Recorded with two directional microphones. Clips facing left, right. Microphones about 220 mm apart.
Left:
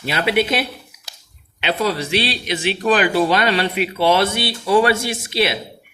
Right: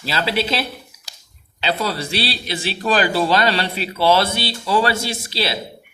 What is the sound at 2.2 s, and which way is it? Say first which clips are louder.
Speech: left 2 dB; 35° right (ahead or behind).